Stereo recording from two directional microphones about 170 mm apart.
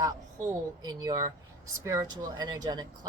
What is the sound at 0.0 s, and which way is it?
A woman's voice, 20° right (ahead or behind).